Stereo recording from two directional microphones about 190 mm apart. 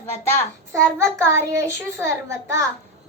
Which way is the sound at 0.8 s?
15° right (ahead or behind).